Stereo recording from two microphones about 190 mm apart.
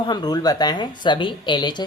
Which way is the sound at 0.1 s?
20° left (ahead or behind).